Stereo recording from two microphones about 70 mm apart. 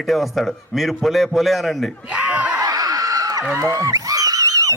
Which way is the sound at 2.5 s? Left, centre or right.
Right.